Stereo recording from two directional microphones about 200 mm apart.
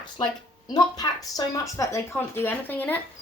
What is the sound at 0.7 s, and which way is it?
A woman's voice, 20° left (ahead or behind).